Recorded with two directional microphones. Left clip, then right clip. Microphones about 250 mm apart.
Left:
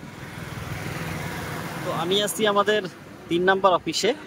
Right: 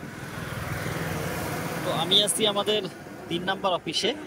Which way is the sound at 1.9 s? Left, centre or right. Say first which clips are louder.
Right 1 dB; centre.